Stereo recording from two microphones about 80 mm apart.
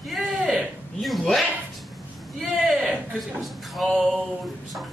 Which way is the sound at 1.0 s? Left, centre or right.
Centre.